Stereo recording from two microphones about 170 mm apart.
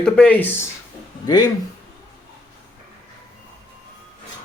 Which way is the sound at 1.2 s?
20° left (ahead or behind).